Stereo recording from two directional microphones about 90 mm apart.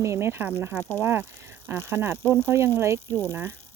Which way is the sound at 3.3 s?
25° right (ahead or behind).